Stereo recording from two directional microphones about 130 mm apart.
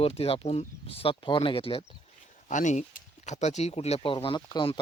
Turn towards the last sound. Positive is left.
turn(degrees=35)  # may be behind; listen again after turning